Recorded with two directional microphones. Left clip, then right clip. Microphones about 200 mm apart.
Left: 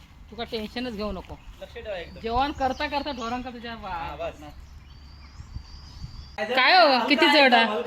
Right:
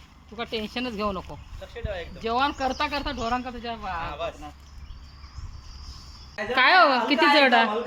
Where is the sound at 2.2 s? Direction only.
60° right (ahead or behind).